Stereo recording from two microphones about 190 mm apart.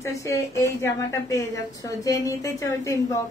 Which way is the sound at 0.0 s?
15° left (ahead or behind).